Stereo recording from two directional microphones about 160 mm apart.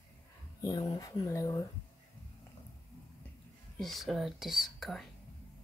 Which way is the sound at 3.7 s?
Centre (ahead or behind).